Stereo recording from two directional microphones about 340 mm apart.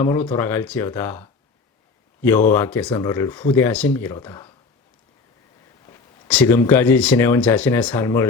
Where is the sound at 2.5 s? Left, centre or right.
Centre.